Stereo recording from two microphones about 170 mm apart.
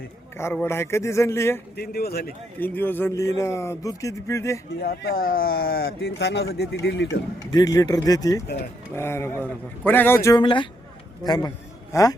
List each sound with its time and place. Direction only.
0.3 s speech: 15° left (ahead or behind)
1.7 s speech: 65° left (ahead or behind)
2.6 s speech: 10° left (ahead or behind)
4.8 s speech: 65° left (ahead or behind); by 7.2 s 90° left
7.5 s speech: 20° left (ahead or behind)
10.4 s a man's voice: 30° left (ahead or behind)